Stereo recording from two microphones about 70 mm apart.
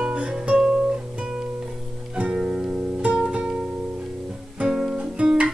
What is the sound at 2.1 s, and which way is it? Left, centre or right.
Music, centre.